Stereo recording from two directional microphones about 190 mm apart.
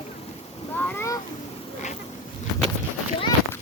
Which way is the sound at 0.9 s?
15° left (ahead or behind).